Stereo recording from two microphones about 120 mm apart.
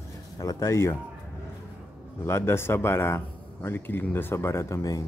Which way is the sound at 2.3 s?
20° left (ahead or behind).